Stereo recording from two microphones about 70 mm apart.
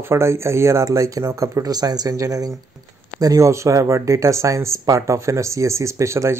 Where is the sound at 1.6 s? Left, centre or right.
Right.